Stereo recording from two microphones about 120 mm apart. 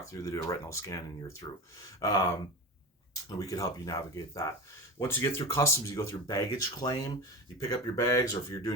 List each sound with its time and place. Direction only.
0.0 s speech: 25° left (ahead or behind)